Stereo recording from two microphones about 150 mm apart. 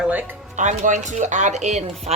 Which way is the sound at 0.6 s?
55° right (ahead or behind).